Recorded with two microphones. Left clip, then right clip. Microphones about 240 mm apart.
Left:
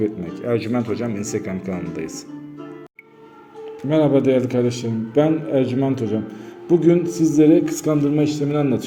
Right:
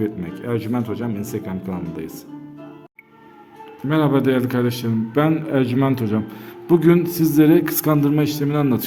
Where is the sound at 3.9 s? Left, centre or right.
Right.